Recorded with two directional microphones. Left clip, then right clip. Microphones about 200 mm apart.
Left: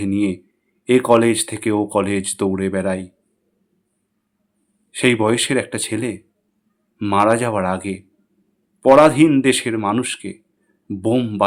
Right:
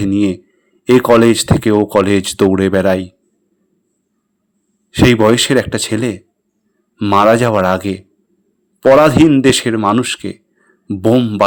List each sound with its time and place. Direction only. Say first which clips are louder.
0.0 s speech: right 6 dB; 30° right (ahead or behind)
4.9 s a man's voice: right 6 dB; 35° right (ahead or behind)